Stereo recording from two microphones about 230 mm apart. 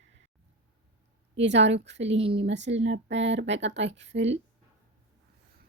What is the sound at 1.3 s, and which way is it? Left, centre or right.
Speech, right.